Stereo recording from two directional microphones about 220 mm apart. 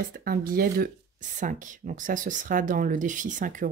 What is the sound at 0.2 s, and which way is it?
A woman's voice, 40° right (ahead or behind).